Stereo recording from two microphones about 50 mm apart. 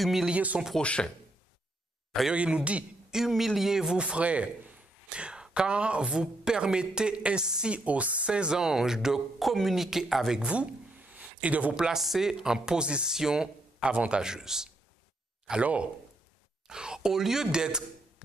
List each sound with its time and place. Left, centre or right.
0.0 s speech: centre
0.3 s a man's voice: right
0.7 s speech: centre
2.3 s a man's voice: right
3.3 s a man's voice: centre
7.7 s a man's voice: right; by 10.4 s centre
10.4 s a sound: right
11.7 s a man's voice: centre
14.2 s a man's voice: centre
15.6 s a man's voice: right
16.6 s speech: centre